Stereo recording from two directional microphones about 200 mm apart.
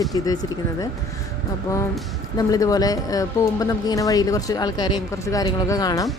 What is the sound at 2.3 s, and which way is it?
Speech, 15° left (ahead or behind).